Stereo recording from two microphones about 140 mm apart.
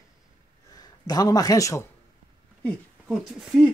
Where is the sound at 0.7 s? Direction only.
30° left (ahead or behind).